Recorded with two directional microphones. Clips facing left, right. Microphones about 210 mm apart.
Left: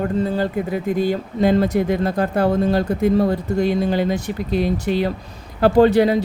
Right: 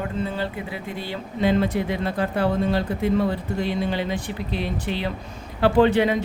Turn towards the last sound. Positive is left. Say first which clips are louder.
# left 4 dB
turn(degrees=35)  # may be behind; listen again after turning